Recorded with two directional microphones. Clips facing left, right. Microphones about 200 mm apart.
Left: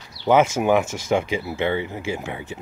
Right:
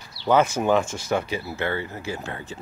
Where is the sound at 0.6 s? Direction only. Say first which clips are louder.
Left 2 dB; 15° left (ahead or behind).